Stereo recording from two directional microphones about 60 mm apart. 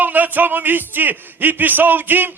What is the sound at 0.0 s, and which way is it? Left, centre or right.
A man's voice, right.